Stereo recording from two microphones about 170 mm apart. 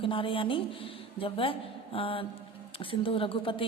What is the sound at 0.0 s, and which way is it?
A woman's voice, 30° left (ahead or behind).